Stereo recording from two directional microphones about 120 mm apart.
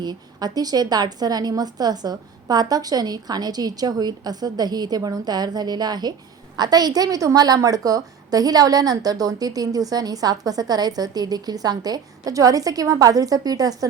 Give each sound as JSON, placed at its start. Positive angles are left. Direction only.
{"t": 0.0, "sound": "a woman's voice", "side_deg": -35}